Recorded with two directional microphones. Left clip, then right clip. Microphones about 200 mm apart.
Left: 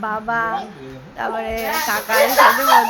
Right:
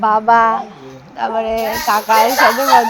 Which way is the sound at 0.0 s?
30° right (ahead or behind).